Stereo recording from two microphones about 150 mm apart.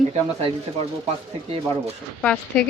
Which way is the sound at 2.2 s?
5° left (ahead or behind).